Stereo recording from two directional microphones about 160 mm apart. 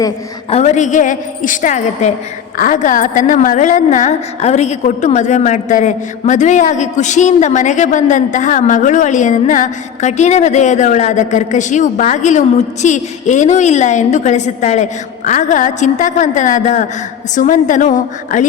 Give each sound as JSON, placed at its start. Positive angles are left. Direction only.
{"t": 0.5, "sound": "a woman's voice", "side_deg": 45}